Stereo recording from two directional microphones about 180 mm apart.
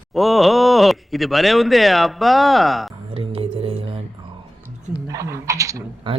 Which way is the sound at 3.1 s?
30° right (ahead or behind).